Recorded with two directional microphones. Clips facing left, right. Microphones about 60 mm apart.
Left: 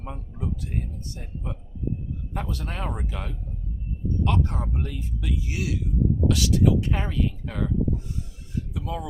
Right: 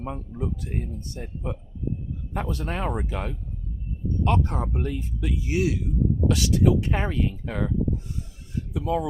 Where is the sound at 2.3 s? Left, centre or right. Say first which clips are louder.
Right 4 dB; right.